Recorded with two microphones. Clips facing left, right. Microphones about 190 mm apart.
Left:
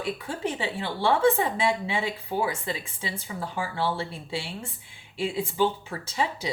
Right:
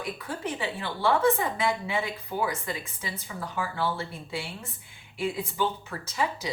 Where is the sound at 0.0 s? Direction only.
25° left (ahead or behind).